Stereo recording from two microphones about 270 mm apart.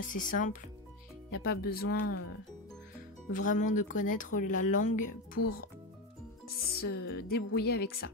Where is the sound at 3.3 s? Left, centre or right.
Left.